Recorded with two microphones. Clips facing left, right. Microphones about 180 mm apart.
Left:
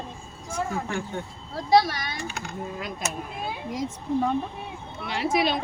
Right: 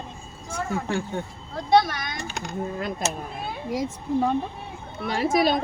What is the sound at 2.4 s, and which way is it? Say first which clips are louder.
Speech: right 4 dB; 40° right (ahead or behind).